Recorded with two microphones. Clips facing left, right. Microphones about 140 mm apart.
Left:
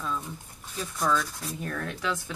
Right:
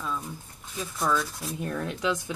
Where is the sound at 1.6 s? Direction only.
20° right (ahead or behind).